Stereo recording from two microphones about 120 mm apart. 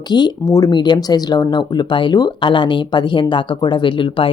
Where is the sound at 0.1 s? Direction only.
35° left (ahead or behind).